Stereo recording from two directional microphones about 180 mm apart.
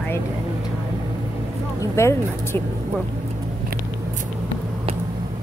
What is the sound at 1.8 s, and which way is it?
Speech, 15° left (ahead or behind).